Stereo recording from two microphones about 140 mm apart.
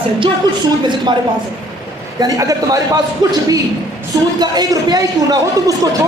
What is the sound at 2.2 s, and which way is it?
Speech, 25° right (ahead or behind).